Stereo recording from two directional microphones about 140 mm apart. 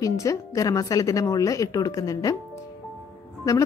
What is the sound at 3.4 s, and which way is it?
Speech, 25° left (ahead or behind).